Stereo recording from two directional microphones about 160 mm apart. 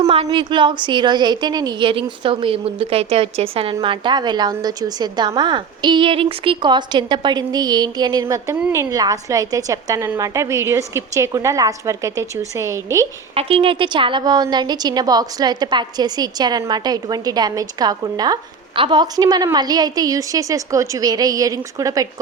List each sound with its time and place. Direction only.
0.1 s a woman's voice: 35° right (ahead or behind); by 13.1 s 20° right (ahead or behind)
13.3 s a woman's voice: 35° right (ahead or behind); by 22.0 s 20° right (ahead or behind)